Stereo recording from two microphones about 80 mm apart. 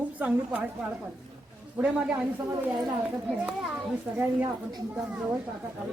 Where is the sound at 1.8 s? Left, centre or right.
Centre.